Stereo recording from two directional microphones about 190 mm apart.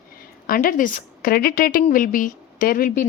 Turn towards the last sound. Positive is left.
turn(degrees=50)  # may be behind; listen again after turning